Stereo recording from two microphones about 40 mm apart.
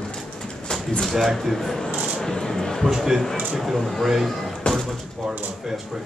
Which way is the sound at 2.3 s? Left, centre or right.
Centre.